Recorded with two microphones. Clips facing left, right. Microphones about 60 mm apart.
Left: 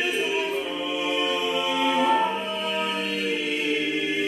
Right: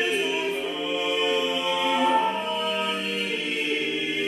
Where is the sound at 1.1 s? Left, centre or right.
Left.